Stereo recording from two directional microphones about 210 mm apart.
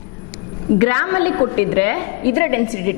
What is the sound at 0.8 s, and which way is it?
A woman's voice, 15° left (ahead or behind).